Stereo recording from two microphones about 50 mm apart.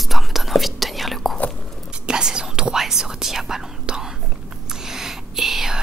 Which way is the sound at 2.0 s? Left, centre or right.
Centre.